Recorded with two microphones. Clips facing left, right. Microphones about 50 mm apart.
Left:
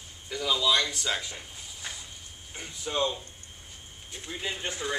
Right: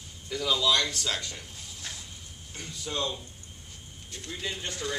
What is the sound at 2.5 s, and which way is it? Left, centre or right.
A man's voice, centre.